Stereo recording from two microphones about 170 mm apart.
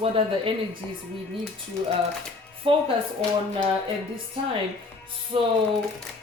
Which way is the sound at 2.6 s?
30° right (ahead or behind).